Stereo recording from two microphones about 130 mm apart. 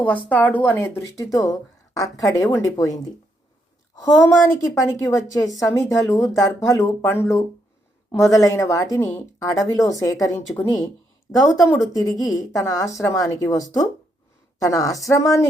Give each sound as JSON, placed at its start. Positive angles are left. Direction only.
{"t": 0.3, "sound": "a woman's voice", "side_deg": 10}
{"t": 10.5, "sound": "speech", "side_deg": 15}
{"t": 11.3, "sound": "a woman's voice", "side_deg": 25}